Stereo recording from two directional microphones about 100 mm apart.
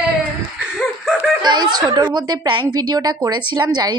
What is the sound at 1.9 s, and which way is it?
A woman's voice, 50° right (ahead or behind).